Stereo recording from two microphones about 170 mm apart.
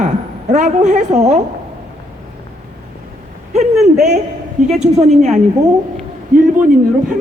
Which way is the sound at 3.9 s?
40° right (ahead or behind).